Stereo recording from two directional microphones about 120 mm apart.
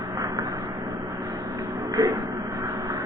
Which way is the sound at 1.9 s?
30° right (ahead or behind).